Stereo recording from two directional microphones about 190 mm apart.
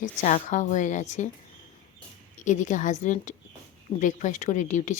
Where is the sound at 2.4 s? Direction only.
40° left (ahead or behind).